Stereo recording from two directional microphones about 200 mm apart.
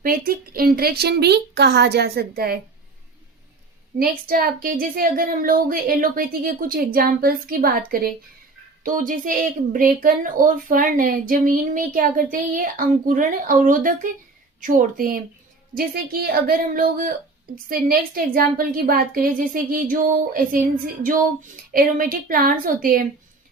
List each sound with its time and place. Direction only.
0.0 s a woman's voice: 45° right (ahead or behind)
3.9 s a woman's voice: 45° right (ahead or behind)